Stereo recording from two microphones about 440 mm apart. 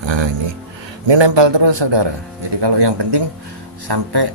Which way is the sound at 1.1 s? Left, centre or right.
Right.